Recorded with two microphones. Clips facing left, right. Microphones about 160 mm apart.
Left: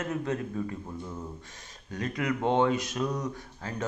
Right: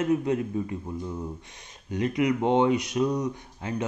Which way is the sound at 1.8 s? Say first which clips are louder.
Right 6 dB; 15° right (ahead or behind).